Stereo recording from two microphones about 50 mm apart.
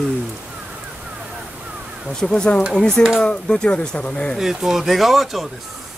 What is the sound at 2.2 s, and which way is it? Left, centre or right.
Speech, centre.